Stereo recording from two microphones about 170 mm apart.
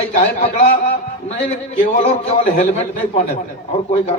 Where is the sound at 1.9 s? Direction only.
40° left (ahead or behind).